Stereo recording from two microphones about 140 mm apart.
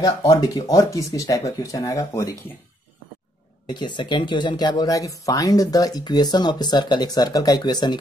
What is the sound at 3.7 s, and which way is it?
Speech, 35° left (ahead or behind).